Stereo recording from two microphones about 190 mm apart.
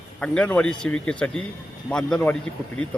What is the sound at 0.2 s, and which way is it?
A man's voice, 5° left (ahead or behind).